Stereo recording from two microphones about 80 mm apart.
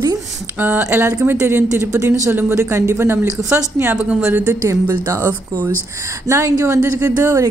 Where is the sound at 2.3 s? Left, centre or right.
Right.